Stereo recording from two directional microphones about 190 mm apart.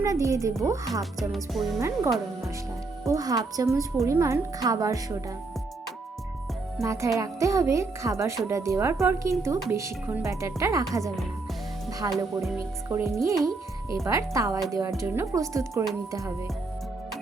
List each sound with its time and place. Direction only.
0.0 s a woman's voice: 15° right (ahead or behind)
1.2 s music: centre (ahead or behind)
2.0 s speech: centre (ahead or behind)
3.1 s a woman's voice: 20° right (ahead or behind)
6.8 s a woman's voice: 15° right (ahead or behind)
11.9 s music: 15° right (ahead or behind)
12.1 s music: centre (ahead or behind)
12.5 s a woman's voice: 15° right (ahead or behind)